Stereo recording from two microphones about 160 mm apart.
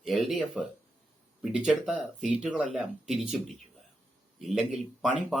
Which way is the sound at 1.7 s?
Centre (ahead or behind).